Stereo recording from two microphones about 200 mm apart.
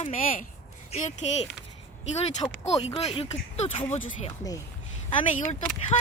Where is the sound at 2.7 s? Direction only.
30° left (ahead or behind).